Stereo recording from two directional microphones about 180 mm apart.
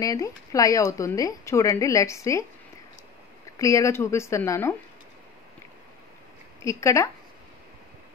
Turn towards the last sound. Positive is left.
turn(degrees=15)  # may be behind; listen again after turning